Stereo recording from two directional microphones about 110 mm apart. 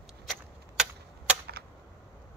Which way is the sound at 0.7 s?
5° right (ahead or behind).